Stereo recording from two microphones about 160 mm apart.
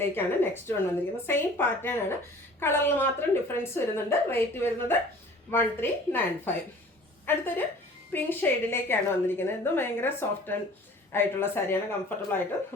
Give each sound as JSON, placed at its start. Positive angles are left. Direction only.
{"t": 0.0, "sound": "a woman's voice", "side_deg": 15}